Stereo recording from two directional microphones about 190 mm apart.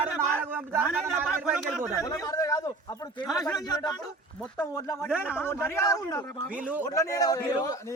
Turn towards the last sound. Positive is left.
turn(degrees=20)  # may be behind; listen again after turning